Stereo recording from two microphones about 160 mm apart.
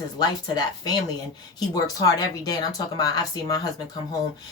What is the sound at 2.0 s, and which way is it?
Speech, 25° left (ahead or behind).